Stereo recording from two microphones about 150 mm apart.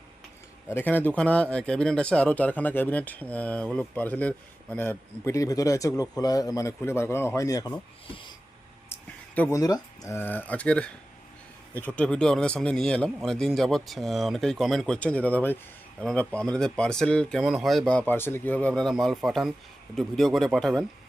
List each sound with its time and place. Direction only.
0.7 s speech: 15° left (ahead or behind)
8.0 s speech: 35° left (ahead or behind)
9.5 s a man's voice: 25° left (ahead or behind); by 20.8 s 5° left (ahead or behind)